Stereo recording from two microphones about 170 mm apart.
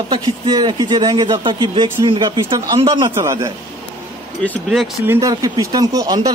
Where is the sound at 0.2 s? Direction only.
25° right (ahead or behind).